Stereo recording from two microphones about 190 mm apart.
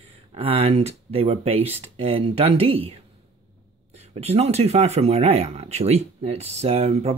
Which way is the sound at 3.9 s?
35° right (ahead or behind).